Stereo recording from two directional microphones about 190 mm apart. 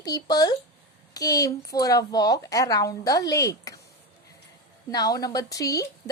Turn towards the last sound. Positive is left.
turn(degrees=20)  # may be behind; listen again after turning